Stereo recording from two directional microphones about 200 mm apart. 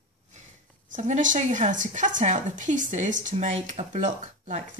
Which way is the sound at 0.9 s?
40° right (ahead or behind).